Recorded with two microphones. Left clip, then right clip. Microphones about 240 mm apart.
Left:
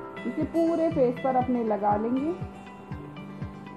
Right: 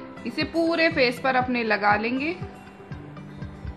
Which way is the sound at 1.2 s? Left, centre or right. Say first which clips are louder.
Right 2 dB; right.